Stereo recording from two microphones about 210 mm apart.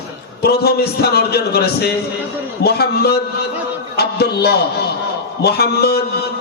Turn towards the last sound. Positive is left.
turn(degrees=50)  # may be behind; listen again after turning